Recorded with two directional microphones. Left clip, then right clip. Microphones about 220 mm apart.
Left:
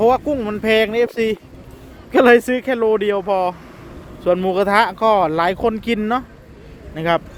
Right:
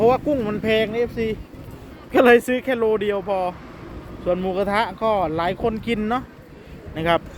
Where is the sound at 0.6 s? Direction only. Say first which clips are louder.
Left 8 dB; 35° left (ahead or behind).